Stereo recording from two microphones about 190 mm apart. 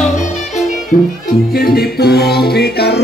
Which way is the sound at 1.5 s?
55° left (ahead or behind).